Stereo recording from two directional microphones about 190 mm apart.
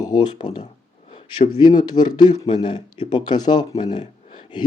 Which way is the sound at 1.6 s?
25° left (ahead or behind).